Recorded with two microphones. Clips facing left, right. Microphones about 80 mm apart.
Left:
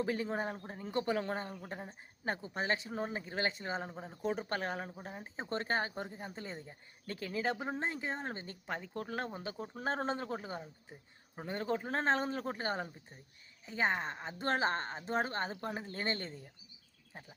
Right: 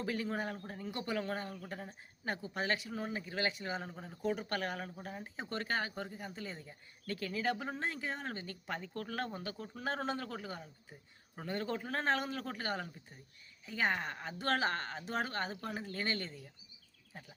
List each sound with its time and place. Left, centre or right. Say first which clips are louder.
0.0 s speech: left 2 dB; left